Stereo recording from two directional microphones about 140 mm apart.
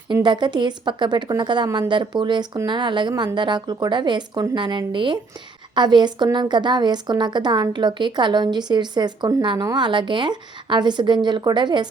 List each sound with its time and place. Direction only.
0.1 s a woman's voice: 35° right (ahead or behind)